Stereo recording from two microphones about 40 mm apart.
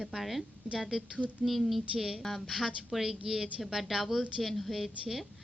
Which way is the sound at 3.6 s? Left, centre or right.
Centre.